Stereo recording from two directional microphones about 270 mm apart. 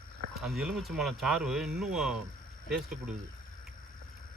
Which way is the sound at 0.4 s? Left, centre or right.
Centre.